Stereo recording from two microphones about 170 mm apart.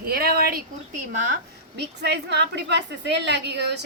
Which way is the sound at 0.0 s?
65° right (ahead or behind).